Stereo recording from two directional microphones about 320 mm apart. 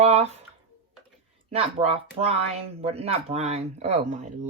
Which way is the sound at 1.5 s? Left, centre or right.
Centre.